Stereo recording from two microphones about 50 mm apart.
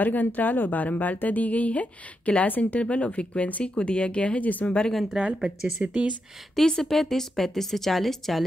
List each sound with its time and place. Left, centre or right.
0.0 s speech: left
5.2 s speech: centre
5.8 s speech: right
6.5 s a woman's voice: centre